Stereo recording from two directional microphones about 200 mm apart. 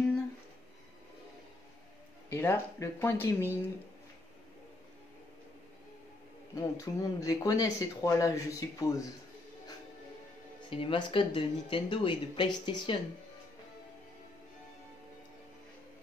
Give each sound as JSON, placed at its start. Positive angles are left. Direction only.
{"t": 2.2, "sound": "speech", "side_deg": 10}
{"t": 6.6, "sound": "speech", "side_deg": 15}
{"t": 10.7, "sound": "speech", "side_deg": 25}